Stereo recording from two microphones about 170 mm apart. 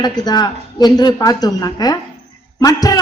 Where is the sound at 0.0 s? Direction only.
25° left (ahead or behind).